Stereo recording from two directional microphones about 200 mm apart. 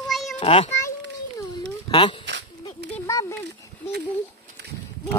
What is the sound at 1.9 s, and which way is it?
Speech, 25° left (ahead or behind).